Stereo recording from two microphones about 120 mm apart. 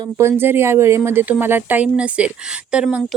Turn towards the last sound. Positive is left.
turn(degrees=-5)  # may be behind; listen again after turning